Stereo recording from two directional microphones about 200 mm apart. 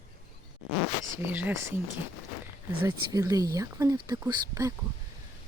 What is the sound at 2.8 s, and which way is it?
Speech, 15° right (ahead or behind).